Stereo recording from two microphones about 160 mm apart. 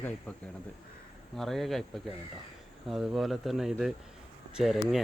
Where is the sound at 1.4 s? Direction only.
Centre (ahead or behind).